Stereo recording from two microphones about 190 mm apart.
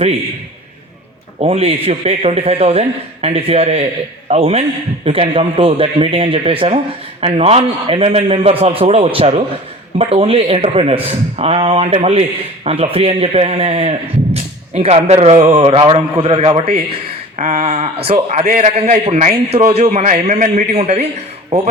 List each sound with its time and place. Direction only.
1.4 s a man's voice: 30° right (ahead or behind)